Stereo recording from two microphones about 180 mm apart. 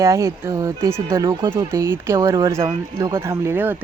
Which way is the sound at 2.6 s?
30° right (ahead or behind).